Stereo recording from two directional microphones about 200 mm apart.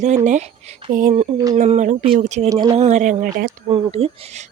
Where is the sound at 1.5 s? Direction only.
35° right (ahead or behind).